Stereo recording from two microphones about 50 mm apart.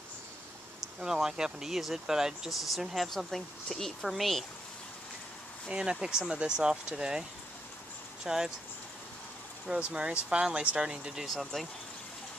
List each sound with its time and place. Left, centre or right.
0.7 s speech: centre
5.7 s speech: centre
9.7 s speech: right
11.2 s speech: centre